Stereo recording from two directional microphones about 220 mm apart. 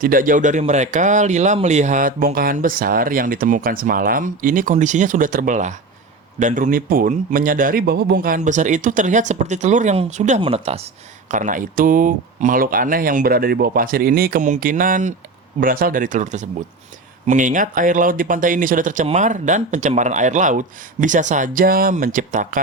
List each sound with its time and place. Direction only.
0.0 s speech: 40° right (ahead or behind)